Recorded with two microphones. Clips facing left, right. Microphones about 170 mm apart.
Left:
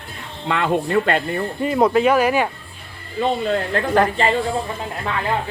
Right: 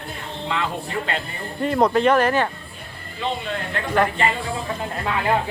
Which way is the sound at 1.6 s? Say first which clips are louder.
Left 1 dB; 5° left (ahead or behind).